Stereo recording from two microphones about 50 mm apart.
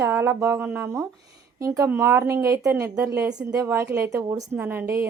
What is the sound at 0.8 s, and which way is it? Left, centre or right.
A woman's voice, right.